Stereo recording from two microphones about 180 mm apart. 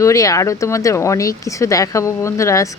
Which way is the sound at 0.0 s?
15° left (ahead or behind).